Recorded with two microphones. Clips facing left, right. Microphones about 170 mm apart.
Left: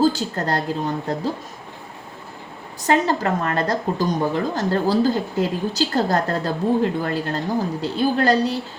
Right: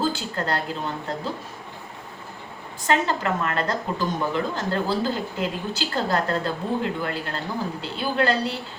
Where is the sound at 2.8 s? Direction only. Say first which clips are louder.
Left 4 dB; 40° left (ahead or behind).